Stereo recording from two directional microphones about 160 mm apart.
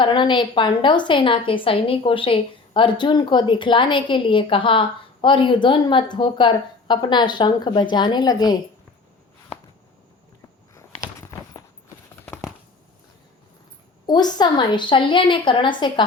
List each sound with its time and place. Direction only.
0.0 s a woman's voice: 30° left (ahead or behind)
10.8 s a sound: 20° left (ahead or behind)
12.2 s tearing: 10° left (ahead or behind)
14.1 s a woman's voice: 25° left (ahead or behind)